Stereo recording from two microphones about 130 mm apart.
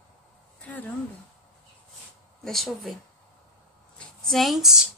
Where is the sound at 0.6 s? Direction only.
10° left (ahead or behind).